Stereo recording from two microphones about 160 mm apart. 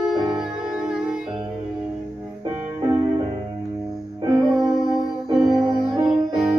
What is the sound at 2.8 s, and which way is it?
Music, 30° right (ahead or behind).